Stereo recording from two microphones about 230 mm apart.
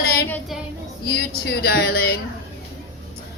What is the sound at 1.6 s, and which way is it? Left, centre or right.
Speech, left.